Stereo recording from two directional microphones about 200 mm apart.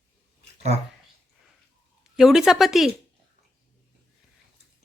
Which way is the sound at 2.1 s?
Centre (ahead or behind).